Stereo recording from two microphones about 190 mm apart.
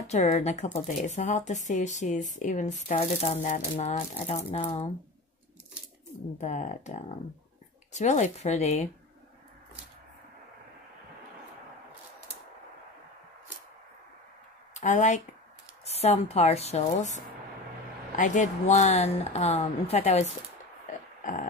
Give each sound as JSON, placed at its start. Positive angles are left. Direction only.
{"t": 0.0, "sound": "speech", "side_deg": 35}
{"t": 6.3, "sound": "speech", "side_deg": 40}
{"t": 14.7, "sound": "speech", "side_deg": 40}